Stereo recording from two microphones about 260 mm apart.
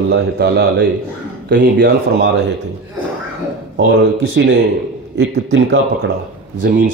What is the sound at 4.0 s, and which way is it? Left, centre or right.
A man's voice, right.